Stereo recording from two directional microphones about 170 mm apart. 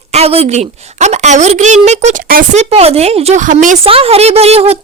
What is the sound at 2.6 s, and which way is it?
Speech, 35° right (ahead or behind).